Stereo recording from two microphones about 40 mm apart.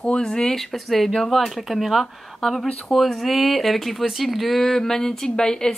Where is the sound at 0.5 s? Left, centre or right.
Centre.